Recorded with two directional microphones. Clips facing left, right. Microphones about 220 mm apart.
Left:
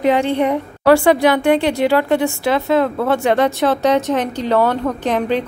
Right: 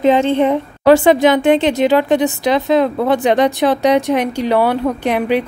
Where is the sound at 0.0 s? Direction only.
20° right (ahead or behind).